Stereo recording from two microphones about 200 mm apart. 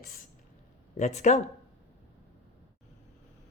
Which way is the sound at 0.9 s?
35° left (ahead or behind).